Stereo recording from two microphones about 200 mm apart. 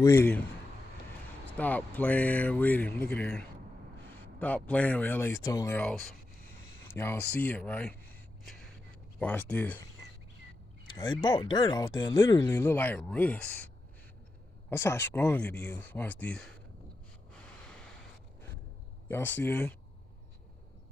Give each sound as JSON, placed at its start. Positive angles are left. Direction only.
{"t": 0.0, "sound": "speech", "side_deg": 15}
{"t": 1.6, "sound": "speech", "side_deg": 10}
{"t": 9.2, "sound": "speech", "side_deg": 10}
{"t": 10.9, "sound": "a sound", "side_deg": 20}
{"t": 11.2, "sound": "speech", "side_deg": 25}
{"t": 14.7, "sound": "speech", "side_deg": 10}
{"t": 19.0, "sound": "speech", "side_deg": 10}